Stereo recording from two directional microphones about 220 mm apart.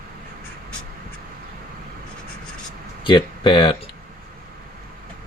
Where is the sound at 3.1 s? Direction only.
20° left (ahead or behind).